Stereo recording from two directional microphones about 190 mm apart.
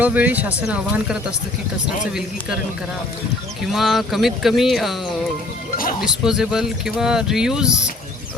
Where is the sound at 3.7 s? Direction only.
Centre (ahead or behind).